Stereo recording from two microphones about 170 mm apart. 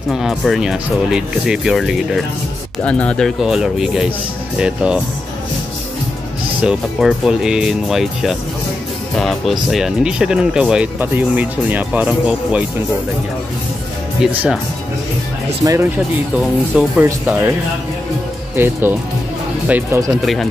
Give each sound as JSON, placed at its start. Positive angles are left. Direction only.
{"t": 0.1, "sound": "speech", "side_deg": 0}
{"t": 6.6, "sound": "speech", "side_deg": -5}
{"t": 14.2, "sound": "speech", "side_deg": -5}
{"t": 15.6, "sound": "speech", "side_deg": -20}
{"t": 18.6, "sound": "speech", "side_deg": -10}